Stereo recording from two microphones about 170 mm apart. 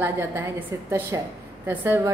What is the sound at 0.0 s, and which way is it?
A woman's voice, 15° right (ahead or behind).